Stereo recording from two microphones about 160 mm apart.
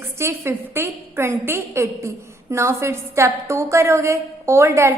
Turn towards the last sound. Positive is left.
turn(degrees=-15)  # may be behind; listen again after turning